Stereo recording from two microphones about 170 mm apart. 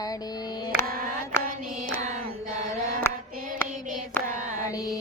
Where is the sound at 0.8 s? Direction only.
60° right (ahead or behind).